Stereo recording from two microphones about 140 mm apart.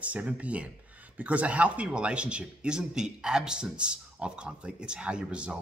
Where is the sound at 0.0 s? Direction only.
10° right (ahead or behind).